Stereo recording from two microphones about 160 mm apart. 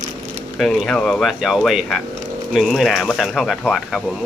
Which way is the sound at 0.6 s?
Centre (ahead or behind).